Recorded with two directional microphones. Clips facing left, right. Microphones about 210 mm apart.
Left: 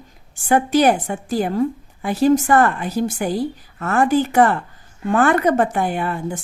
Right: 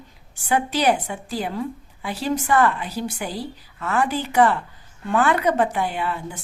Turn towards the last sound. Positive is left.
turn(degrees=50)  # may be behind; listen again after turning